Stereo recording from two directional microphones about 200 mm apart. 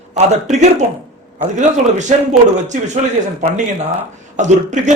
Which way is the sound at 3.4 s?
30° right (ahead or behind).